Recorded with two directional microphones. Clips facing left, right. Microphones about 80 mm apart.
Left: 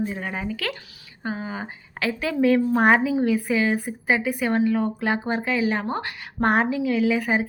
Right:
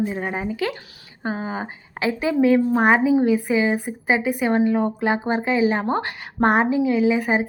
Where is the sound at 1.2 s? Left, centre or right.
Right.